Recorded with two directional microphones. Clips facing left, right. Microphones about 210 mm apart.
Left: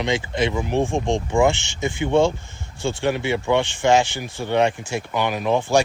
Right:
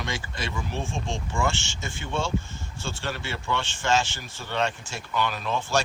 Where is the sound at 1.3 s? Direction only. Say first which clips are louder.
Left 9 dB; 15° left (ahead or behind).